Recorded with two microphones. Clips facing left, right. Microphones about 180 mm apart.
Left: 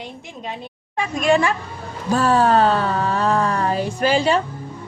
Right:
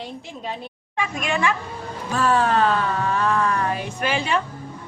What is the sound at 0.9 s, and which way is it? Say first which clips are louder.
Speech: left 7 dB; 35° left (ahead or behind).